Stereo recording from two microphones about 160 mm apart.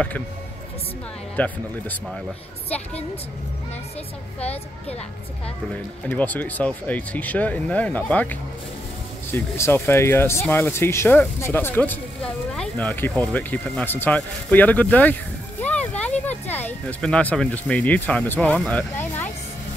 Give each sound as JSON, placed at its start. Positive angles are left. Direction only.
{"t": 1.3, "sound": "speech", "side_deg": 10}
{"t": 4.4, "sound": "a woman's voice", "side_deg": 40}
{"t": 6.0, "sound": "speech", "side_deg": 10}